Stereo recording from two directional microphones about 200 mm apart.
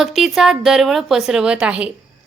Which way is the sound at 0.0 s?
Centre (ahead or behind).